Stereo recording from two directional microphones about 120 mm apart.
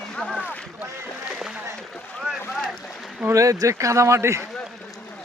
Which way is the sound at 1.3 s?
5° right (ahead or behind).